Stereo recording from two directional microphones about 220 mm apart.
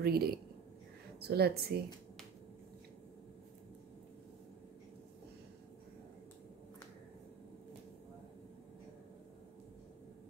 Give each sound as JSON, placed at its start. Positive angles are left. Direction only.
{"t": 0.0, "sound": "speech", "side_deg": -45}